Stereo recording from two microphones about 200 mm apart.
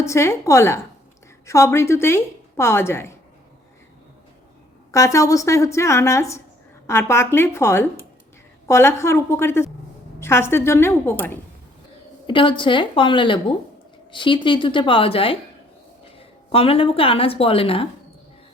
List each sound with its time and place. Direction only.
0.0 s a woman's voice: 15° left (ahead or behind)
4.9 s a woman's voice: 15° left (ahead or behind)
12.2 s a woman's voice: 25° left (ahead or behind)